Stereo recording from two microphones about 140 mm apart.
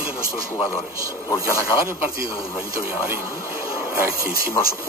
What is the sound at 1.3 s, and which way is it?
Speech, 20° left (ahead or behind).